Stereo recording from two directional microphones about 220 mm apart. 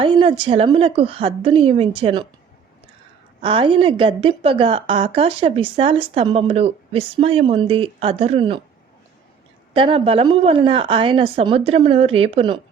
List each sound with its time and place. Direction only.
0.0 s a woman's voice: 20° right (ahead or behind)
3.4 s a woman's voice: 25° right (ahead or behind)
9.7 s a woman's voice: 25° right (ahead or behind)